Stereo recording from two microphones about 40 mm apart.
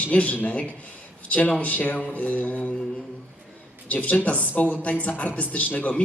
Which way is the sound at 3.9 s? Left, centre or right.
Left.